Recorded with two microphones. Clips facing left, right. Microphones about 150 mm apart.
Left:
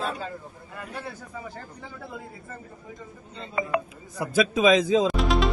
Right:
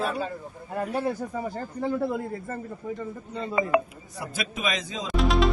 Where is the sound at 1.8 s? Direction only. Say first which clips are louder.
Right 18 dB; 55° right (ahead or behind).